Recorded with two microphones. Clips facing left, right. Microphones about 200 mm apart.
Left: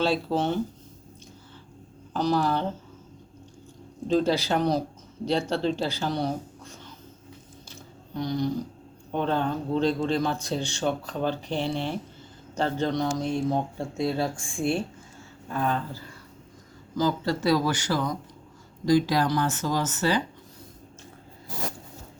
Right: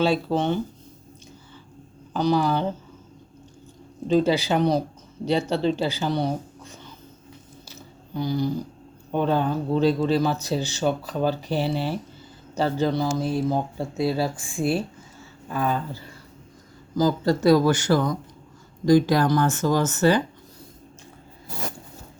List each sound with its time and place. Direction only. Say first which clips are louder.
0.0 s speech: right 3 dB; centre (ahead or behind)
2.1 s speech: right 3 dB; centre (ahead or behind)
4.1 s speech: right 3 dB; centre (ahead or behind)
7.7 s a sound: right 3 dB; 5° right (ahead or behind)
9.1 s speech: right 4 dB; 10° right (ahead or behind)
17.0 s speech: right 5 dB; 40° right (ahead or behind)